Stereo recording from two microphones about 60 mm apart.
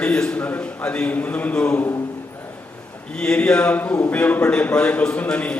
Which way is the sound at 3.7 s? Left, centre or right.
Left.